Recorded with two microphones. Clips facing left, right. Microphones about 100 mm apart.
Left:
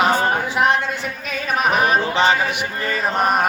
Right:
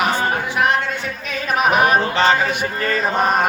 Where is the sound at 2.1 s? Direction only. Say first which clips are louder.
Right 1 dB; 15° left (ahead or behind).